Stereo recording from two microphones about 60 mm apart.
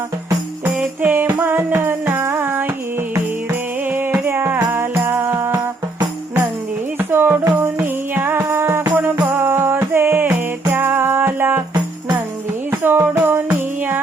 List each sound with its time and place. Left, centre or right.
0.6 s music: right
3.9 s music: right
7.1 s music: right
9.0 s music: right
12.8 s music: right